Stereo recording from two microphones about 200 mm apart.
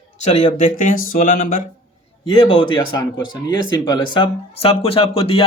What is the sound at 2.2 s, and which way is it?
Speech, 25° left (ahead or behind).